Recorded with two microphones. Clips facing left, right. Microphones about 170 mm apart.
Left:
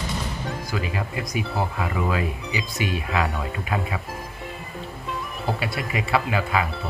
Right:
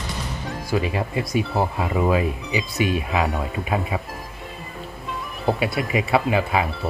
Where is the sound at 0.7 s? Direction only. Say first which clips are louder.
Right 8 dB; 25° right (ahead or behind).